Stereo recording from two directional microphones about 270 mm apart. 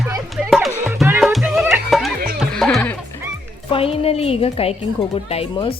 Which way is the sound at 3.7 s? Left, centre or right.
Left.